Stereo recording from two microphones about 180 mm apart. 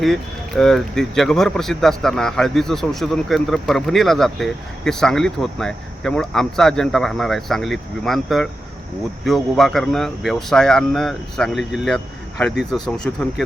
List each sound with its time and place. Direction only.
0.0 s speech: centre (ahead or behind)